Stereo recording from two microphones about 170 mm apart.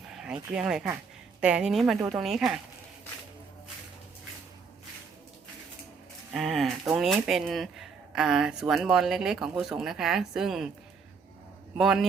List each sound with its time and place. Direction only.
0.1 s a sound: 5° right (ahead or behind)
0.5 s speech: 5° right (ahead or behind)
6.3 s speech: centre (ahead or behind)
11.8 s speech: 5° right (ahead or behind)